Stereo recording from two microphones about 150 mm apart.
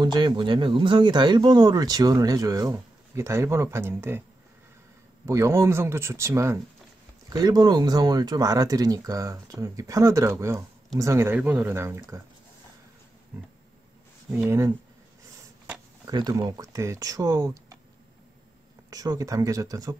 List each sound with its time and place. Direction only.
0.0 s speech: 30° right (ahead or behind)
5.2 s speech: 20° right (ahead or behind)
14.3 s speech: 15° right (ahead or behind)
16.1 s speech: 25° right (ahead or behind)
18.9 s speech: 25° right (ahead or behind)